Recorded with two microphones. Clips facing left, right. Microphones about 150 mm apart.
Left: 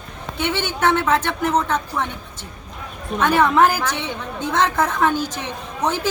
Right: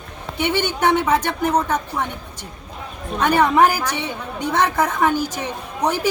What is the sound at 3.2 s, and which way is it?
A woman's voice, 15° right (ahead or behind).